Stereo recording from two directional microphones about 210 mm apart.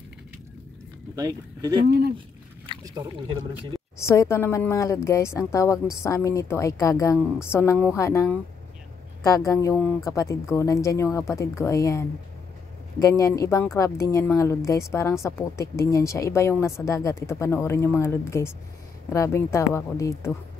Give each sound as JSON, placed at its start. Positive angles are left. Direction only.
{"t": 1.1, "sound": "speech", "side_deg": -20}
{"t": 1.9, "sound": "speech", "side_deg": -50}
{"t": 2.1, "sound": "a sound", "side_deg": -25}
{"t": 4.1, "sound": "speech", "side_deg": 15}